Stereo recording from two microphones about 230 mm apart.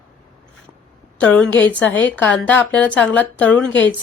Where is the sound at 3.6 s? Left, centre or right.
Left.